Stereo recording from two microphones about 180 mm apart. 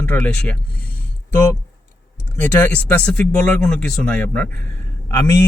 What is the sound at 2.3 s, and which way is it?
Speech, 10° left (ahead or behind).